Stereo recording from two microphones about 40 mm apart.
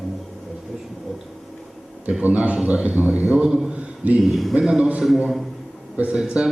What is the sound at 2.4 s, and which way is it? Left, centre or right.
Speech, right.